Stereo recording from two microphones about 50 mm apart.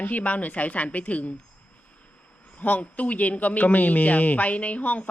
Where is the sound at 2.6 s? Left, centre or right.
Left.